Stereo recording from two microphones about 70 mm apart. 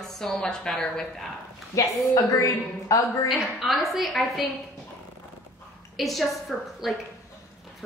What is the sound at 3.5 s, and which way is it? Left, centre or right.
Speech, centre.